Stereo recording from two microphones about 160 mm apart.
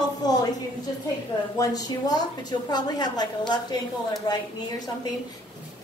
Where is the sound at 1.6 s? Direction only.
25° left (ahead or behind).